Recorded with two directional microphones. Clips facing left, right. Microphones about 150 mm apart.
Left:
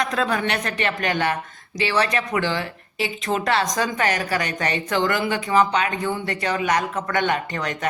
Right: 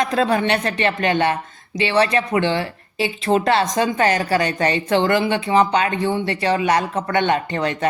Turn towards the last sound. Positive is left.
turn(degrees=-30)  # may be behind; listen again after turning